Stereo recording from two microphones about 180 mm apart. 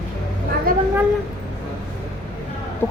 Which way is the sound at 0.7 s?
50° right (ahead or behind).